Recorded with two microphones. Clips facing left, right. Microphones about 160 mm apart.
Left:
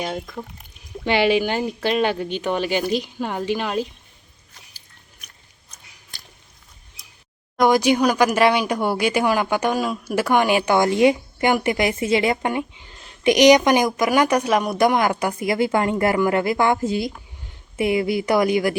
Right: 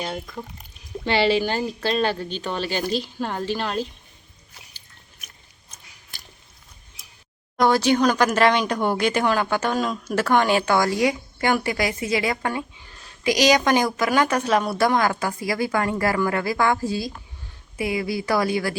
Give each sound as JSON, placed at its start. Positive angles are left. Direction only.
{"t": 0.3, "sound": "speech", "side_deg": 0}
{"t": 1.0, "sound": "speech", "side_deg": 15}
{"t": 7.6, "sound": "a woman's voice", "side_deg": 15}